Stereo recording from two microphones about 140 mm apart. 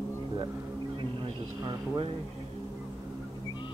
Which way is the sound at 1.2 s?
35° right (ahead or behind).